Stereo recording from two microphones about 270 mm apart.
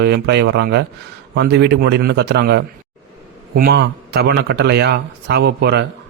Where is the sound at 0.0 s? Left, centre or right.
Right.